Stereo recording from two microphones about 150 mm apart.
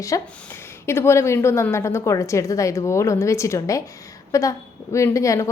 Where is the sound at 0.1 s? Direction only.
25° left (ahead or behind).